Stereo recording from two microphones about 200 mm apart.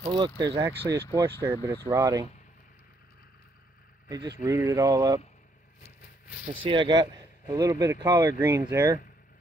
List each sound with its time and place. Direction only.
0.0 s speech: 20° right (ahead or behind)
4.4 s speech: 15° right (ahead or behind)
6.6 s speech: 25° right (ahead or behind)